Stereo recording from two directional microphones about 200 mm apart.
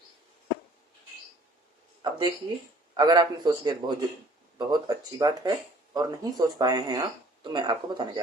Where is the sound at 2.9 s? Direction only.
20° right (ahead or behind).